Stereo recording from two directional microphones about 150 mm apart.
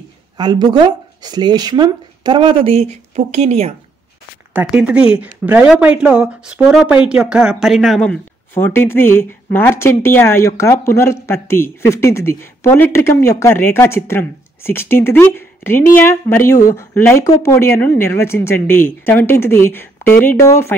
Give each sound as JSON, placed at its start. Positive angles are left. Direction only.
{"t": 0.4, "sound": "speech", "side_deg": -30}
{"t": 4.6, "sound": "speech", "side_deg": -5}